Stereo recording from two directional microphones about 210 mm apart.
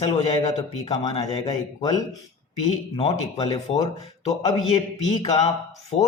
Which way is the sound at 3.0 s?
30° left (ahead or behind).